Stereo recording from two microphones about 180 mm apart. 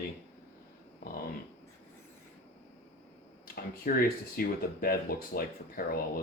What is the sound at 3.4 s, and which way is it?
Speech, 55° left (ahead or behind).